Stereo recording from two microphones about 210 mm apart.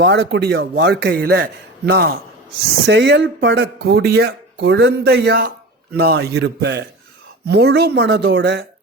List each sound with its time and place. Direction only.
0.0 s speech: 50° right (ahead or behind)